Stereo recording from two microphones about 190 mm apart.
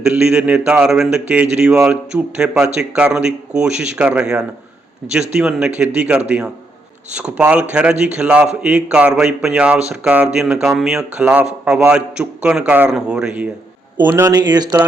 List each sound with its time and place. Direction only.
0.0 s speech: 5° right (ahead or behind)